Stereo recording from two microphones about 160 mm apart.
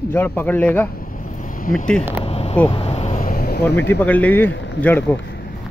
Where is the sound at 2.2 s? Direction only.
40° left (ahead or behind).